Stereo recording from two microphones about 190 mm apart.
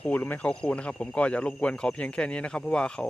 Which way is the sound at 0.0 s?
10° left (ahead or behind).